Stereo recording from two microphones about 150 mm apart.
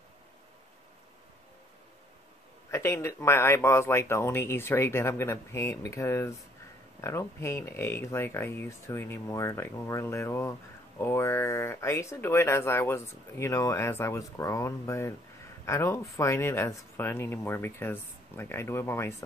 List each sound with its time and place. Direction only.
2.7 s speech: 20° left (ahead or behind)